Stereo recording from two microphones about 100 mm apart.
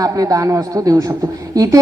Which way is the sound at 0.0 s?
35° right (ahead or behind).